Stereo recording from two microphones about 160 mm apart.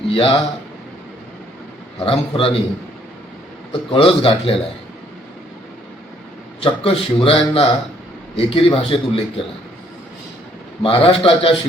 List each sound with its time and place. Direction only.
0.1 s speech: 35° left (ahead or behind)
2.0 s a man's voice: 35° left (ahead or behind)
3.7 s a man's voice: 35° left (ahead or behind)
6.6 s a man's voice: 35° left (ahead or behind)
10.8 s a man's voice: 35° left (ahead or behind)